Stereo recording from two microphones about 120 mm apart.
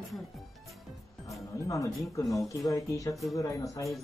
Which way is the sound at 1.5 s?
25° left (ahead or behind).